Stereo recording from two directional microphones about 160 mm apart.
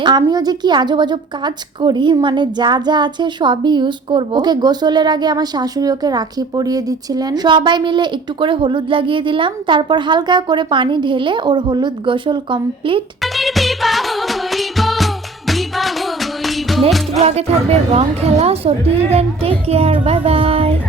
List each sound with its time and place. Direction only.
0.0 s a woman's voice: 25° right (ahead or behind)
13.2 s music: centre (ahead or behind)
17.2 s speech: 40° right (ahead or behind)